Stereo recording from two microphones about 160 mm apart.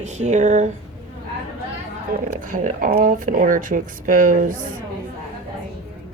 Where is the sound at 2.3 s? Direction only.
55° right (ahead or behind).